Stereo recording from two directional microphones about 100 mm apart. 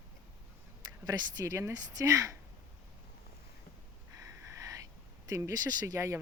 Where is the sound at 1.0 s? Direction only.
35° right (ahead or behind).